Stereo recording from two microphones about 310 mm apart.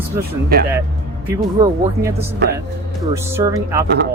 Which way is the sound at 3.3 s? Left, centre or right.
Centre.